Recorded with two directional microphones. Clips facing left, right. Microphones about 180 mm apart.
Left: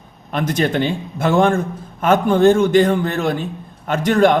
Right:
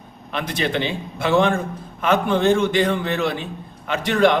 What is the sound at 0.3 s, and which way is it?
A man's voice, 45° left (ahead or behind).